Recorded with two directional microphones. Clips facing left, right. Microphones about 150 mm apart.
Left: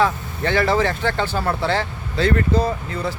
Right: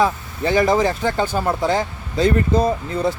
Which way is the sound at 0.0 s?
15° right (ahead or behind).